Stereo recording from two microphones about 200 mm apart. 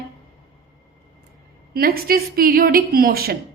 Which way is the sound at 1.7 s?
50° right (ahead or behind).